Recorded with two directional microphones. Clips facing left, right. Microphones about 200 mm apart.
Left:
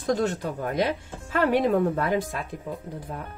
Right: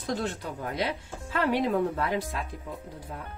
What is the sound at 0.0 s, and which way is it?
Speech, 45° left (ahead or behind).